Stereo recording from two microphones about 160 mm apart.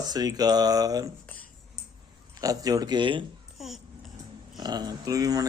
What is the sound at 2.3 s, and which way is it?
Speech, 25° right (ahead or behind).